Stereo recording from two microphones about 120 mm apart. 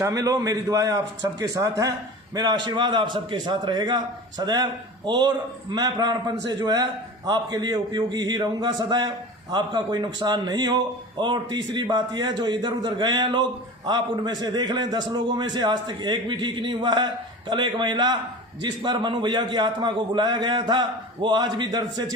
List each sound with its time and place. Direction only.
0.0 s a man's voice: 30° right (ahead or behind)